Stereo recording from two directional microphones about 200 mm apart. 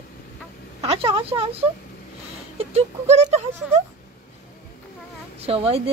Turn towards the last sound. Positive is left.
turn(degrees=-30)  # may be behind; listen again after turning